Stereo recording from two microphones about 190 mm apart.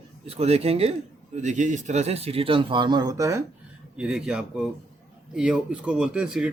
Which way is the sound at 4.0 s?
5° right (ahead or behind).